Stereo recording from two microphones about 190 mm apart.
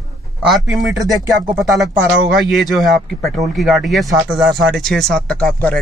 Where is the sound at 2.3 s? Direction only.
Centre (ahead or behind).